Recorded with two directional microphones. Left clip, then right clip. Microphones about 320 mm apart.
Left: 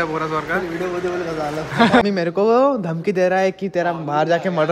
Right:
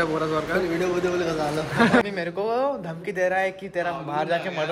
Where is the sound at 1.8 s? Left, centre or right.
Centre.